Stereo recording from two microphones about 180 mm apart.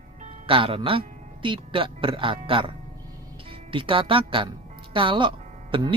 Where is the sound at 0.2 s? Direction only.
30° right (ahead or behind).